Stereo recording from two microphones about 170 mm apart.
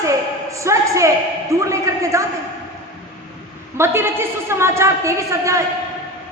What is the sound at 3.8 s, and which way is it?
A woman's voice, 15° right (ahead or behind).